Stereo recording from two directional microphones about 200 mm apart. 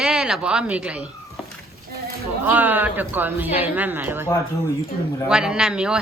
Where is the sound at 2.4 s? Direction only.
10° right (ahead or behind).